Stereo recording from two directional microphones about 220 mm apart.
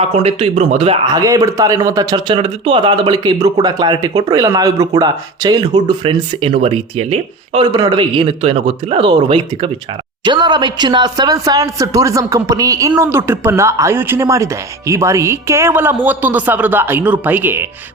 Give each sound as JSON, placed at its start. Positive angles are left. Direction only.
{"t": 0.0, "sound": "a man's voice", "side_deg": -25}